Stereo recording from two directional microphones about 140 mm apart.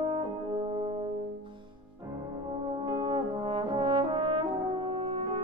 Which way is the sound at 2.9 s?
30° right (ahead or behind).